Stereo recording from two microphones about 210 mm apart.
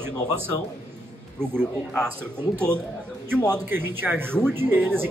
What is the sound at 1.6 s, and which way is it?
Speech, 5° left (ahead or behind).